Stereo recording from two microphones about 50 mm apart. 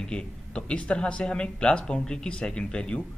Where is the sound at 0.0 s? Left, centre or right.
Centre.